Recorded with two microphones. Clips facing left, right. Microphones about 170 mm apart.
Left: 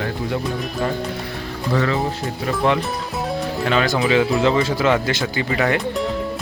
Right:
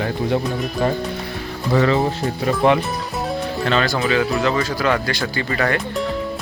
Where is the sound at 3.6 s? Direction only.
15° left (ahead or behind).